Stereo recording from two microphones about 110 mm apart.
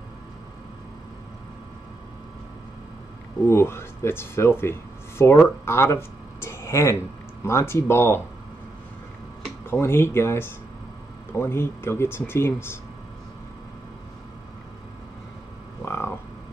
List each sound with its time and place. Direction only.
3.4 s speech: 25° left (ahead or behind)
5.7 s a sound: 20° left (ahead or behind)
7.4 s speech: 25° left (ahead or behind)
9.7 s speech: 20° left (ahead or behind)
15.8 s frog: 20° left (ahead or behind)